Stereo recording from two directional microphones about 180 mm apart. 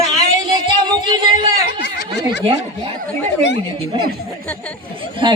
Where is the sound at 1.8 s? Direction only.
65° left (ahead or behind).